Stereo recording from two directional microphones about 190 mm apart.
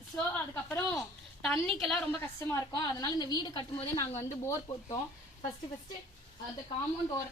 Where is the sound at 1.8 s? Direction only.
5° left (ahead or behind).